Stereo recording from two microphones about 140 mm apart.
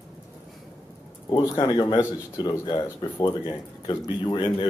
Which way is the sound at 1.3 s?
30° left (ahead or behind).